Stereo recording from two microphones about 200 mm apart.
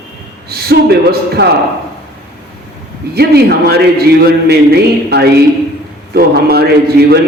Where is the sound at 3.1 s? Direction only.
55° right (ahead or behind).